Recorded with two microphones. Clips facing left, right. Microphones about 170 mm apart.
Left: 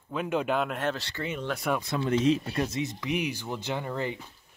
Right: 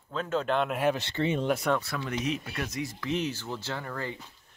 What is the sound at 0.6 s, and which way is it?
Speech, 10° right (ahead or behind).